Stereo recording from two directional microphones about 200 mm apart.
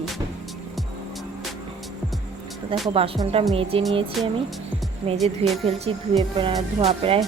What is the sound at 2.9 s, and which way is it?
Speech, 30° right (ahead or behind).